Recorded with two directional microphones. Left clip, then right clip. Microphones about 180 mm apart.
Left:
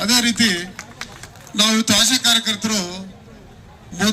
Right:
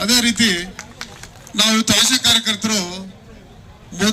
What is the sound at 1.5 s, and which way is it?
A man's voice, 40° right (ahead or behind).